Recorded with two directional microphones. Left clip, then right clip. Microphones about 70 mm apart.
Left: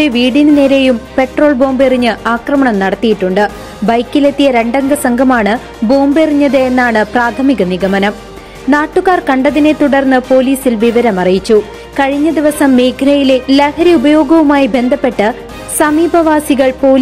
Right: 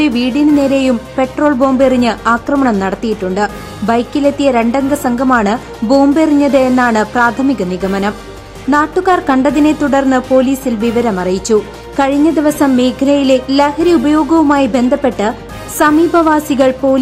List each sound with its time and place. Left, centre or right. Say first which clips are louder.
0.0 s a woman's voice: left 3 dB; left
1.1 s music: left 3 dB; left
1.6 s a woman's voice: left 1 dB; left
9.1 s a woman's voice: even; left